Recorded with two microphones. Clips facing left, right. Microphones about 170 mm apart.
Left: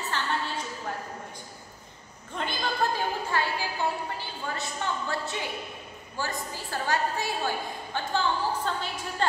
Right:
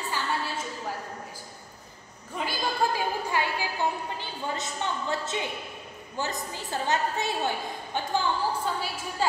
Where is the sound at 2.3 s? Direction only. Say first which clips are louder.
Right 1 dB; 10° right (ahead or behind).